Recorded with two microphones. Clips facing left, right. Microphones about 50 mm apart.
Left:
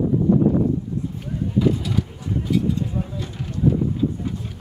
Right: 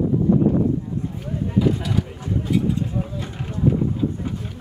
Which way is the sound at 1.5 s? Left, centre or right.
Centre.